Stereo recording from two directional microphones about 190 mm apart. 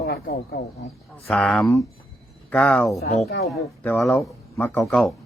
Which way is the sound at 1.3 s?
5° left (ahead or behind).